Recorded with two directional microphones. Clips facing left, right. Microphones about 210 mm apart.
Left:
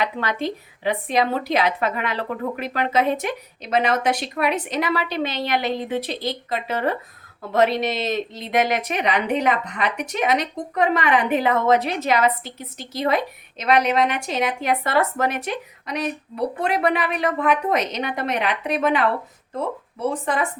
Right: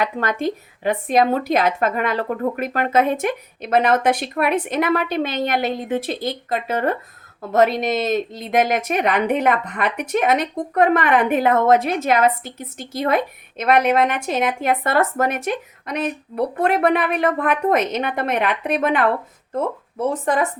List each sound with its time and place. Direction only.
0.0 s speech: 50° right (ahead or behind)
20.2 s speech: 45° right (ahead or behind)